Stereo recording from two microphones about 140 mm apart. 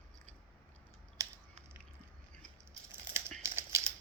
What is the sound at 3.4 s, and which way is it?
Typewriter, 20° right (ahead or behind).